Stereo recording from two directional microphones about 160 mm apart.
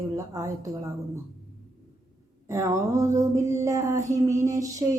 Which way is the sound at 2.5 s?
20° right (ahead or behind).